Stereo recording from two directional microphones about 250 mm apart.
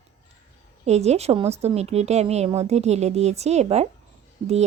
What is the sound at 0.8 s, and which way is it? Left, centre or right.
A woman's voice, right.